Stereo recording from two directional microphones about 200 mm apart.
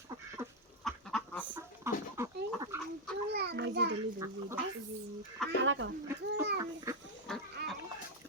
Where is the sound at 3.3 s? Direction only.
55° right (ahead or behind).